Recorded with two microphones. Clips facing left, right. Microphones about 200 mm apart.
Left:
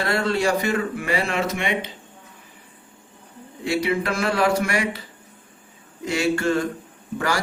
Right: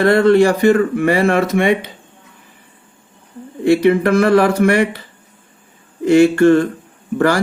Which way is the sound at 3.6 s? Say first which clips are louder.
Right 11 dB; 60° right (ahead or behind).